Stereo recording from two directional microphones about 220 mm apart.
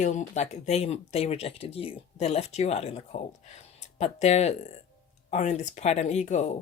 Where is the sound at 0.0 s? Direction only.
35° left (ahead or behind).